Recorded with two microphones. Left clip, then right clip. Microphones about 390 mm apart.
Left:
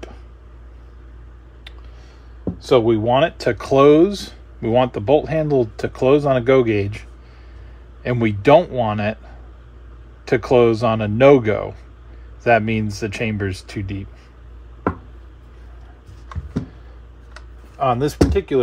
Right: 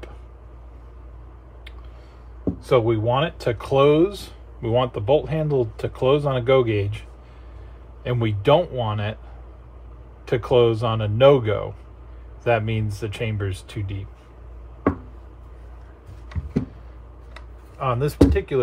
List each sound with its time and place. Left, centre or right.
2.6 s speech: left
8.0 s speech: left
10.2 s speech: left
17.7 s speech: left